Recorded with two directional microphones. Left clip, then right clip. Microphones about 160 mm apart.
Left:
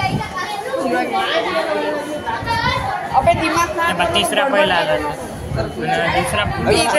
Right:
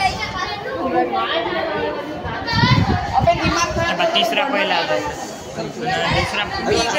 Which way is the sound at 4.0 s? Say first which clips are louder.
Even; 50° left (ahead or behind).